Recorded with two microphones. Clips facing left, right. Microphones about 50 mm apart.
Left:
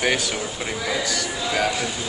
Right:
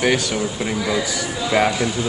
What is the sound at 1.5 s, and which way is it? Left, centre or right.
Speech, right.